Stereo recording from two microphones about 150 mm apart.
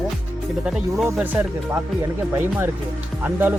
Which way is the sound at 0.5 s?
Centre (ahead or behind).